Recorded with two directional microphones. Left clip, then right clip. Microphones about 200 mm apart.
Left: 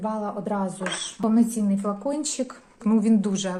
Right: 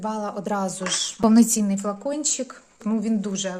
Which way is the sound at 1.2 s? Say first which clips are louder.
Right 5 dB; 55° right (ahead or behind).